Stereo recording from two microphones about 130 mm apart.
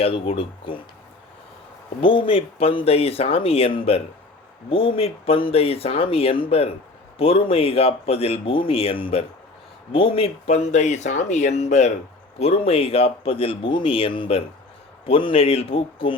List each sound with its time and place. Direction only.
0.0 s speech: 45° left (ahead or behind)
2.0 s speech: 40° left (ahead or behind)